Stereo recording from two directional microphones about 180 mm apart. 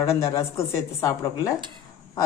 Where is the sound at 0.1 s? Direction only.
15° left (ahead or behind).